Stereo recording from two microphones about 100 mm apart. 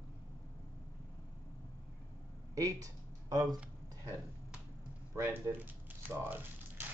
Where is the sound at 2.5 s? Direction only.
35° right (ahead or behind).